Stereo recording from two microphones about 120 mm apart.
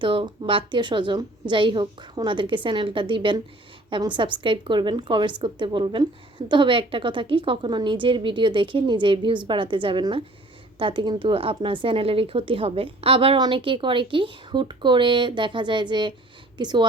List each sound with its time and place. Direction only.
0.0 s a woman's voice: 45° right (ahead or behind)